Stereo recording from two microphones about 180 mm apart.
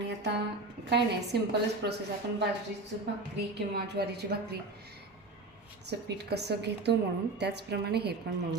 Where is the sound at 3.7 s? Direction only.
65° right (ahead or behind).